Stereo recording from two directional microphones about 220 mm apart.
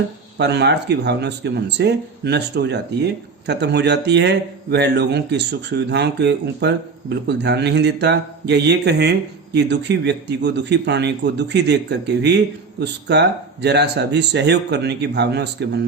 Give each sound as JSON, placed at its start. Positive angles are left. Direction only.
{"t": 0.3, "sound": "speech", "side_deg": -50}